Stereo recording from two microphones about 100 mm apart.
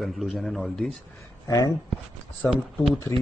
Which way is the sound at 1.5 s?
35° left (ahead or behind).